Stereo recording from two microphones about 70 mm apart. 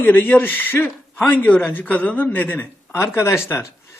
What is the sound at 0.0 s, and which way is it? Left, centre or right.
Speech, left.